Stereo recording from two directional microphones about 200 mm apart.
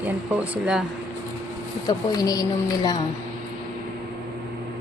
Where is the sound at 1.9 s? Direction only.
20° left (ahead or behind).